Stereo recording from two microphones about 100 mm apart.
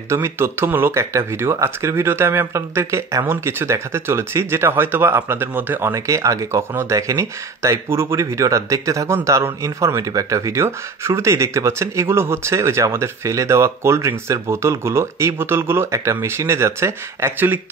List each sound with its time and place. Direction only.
0.1 s speech: 25° right (ahead or behind)